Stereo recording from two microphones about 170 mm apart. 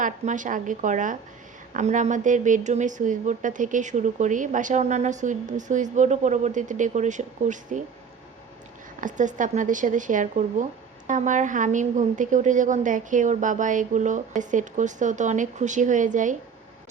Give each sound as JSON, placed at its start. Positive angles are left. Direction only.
{"t": 0.0, "sound": "speech", "side_deg": -50}
{"t": 9.0, "sound": "speech", "side_deg": -50}